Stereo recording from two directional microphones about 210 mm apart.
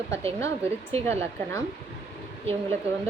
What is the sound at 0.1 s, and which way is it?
A woman's voice, 30° right (ahead or behind).